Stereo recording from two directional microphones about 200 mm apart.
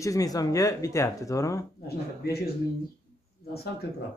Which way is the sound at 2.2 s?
50° left (ahead or behind).